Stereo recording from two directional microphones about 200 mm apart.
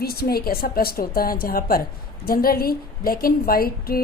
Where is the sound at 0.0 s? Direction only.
50° left (ahead or behind).